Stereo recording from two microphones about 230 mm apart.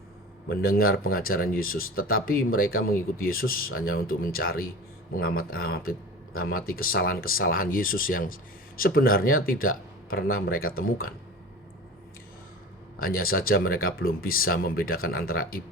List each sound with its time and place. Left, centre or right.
0.4 s a man's voice: left
13.0 s speech: left